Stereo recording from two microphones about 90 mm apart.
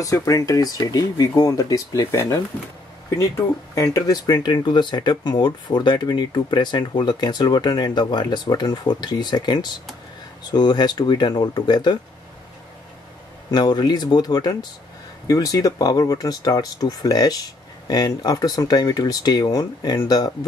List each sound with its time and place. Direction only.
0.0 s speech: 40° left (ahead or behind)
13.5 s speech: 50° left (ahead or behind)
15.2 s speech: 40° left (ahead or behind)